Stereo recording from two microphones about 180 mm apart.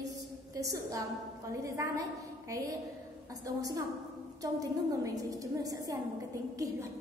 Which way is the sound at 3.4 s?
20° right (ahead or behind).